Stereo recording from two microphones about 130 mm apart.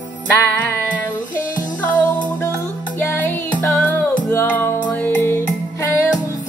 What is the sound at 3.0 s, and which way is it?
Music, 15° left (ahead or behind).